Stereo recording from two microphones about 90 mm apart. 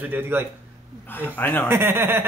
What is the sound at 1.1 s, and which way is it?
Speech, 20° left (ahead or behind).